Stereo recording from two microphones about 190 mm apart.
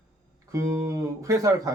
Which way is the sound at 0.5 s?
15° right (ahead or behind).